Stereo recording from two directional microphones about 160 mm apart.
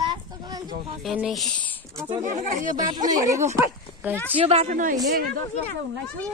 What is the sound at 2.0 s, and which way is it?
Speech, 45° right (ahead or behind).